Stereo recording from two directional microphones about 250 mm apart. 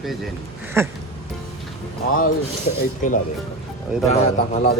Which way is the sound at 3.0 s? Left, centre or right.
Left.